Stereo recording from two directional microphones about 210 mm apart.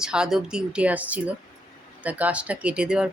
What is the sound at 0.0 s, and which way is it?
Speech, 5° right (ahead or behind).